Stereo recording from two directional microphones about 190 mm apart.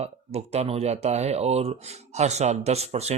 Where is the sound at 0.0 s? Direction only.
35° right (ahead or behind).